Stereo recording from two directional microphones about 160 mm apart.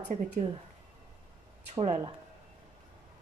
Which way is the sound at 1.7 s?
40° right (ahead or behind).